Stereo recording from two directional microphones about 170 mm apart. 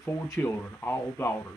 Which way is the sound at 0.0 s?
15° left (ahead or behind).